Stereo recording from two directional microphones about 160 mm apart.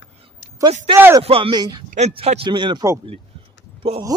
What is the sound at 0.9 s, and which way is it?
Speech, 15° right (ahead or behind).